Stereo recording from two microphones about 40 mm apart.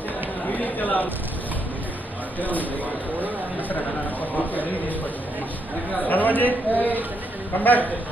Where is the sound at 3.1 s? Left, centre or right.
Right.